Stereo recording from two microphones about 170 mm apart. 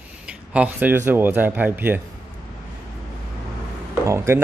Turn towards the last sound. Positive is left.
turn(degrees=-15)  # may be behind; listen again after turning